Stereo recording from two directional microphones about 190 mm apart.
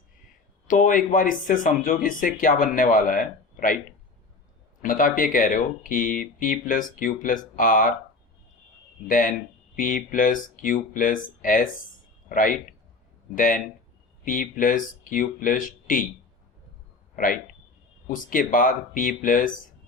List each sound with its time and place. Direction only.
0.7 s speech: 45° left (ahead or behind)
4.8 s speech: 45° left (ahead or behind)
9.0 s speech: 45° left (ahead or behind)
17.2 s speech: 45° left (ahead or behind)